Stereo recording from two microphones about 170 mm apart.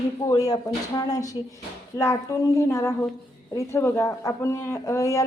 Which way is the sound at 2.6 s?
15° left (ahead or behind).